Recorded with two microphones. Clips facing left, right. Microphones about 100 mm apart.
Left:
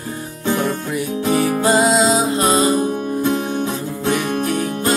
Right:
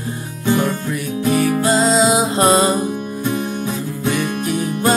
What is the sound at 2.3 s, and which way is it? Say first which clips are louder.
Music: right 2 dB; 35° right (ahead or behind).